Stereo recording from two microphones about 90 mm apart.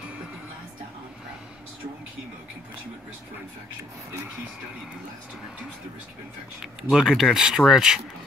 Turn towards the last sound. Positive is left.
turn(degrees=-5)  # may be behind; listen again after turning